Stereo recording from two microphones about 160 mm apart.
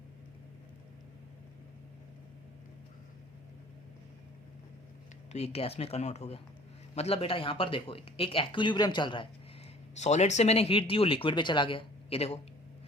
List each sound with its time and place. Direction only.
5.3 s speech: 40° left (ahead or behind)
10.0 s speech: 45° left (ahead or behind)